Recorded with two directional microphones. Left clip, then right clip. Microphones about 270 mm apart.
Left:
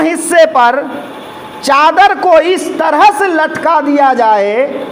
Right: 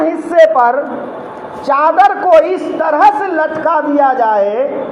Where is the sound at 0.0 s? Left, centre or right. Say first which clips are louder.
Left 1 dB; left.